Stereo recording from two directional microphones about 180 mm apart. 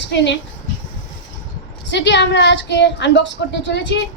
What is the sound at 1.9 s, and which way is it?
A woman's voice, 80° left.